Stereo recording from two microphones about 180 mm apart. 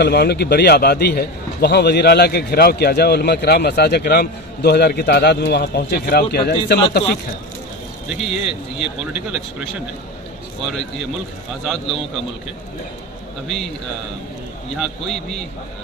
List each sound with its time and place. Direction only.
0.0 s a man's voice: 65° left (ahead or behind)
8.1 s a man's voice: centre (ahead or behind)
11.6 s a man's voice: centre (ahead or behind)
14.8 s a man's voice: centre (ahead or behind)